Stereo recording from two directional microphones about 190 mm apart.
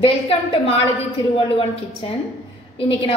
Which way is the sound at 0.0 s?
30° left (ahead or behind).